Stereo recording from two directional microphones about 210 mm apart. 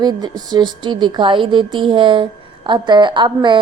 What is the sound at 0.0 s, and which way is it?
A woman's voice, 20° right (ahead or behind).